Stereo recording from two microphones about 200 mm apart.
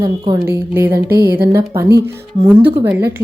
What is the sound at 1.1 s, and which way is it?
Speech, 50° right (ahead or behind).